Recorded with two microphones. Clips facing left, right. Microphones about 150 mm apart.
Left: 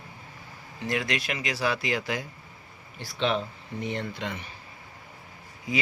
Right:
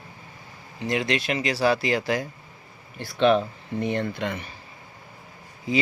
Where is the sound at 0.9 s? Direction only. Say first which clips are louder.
Right 4 dB; 25° right (ahead or behind).